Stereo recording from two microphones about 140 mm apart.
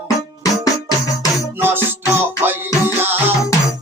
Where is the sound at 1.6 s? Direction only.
15° right (ahead or behind).